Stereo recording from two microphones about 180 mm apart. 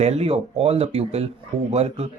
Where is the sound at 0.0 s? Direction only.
35° right (ahead or behind).